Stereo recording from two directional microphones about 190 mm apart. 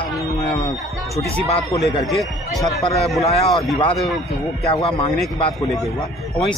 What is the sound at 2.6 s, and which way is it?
Speech, 30° left (ahead or behind).